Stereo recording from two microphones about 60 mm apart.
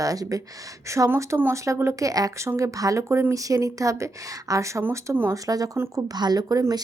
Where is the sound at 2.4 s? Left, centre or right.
Right.